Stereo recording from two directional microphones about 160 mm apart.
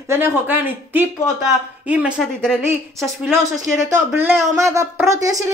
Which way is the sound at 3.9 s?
15° right (ahead or behind).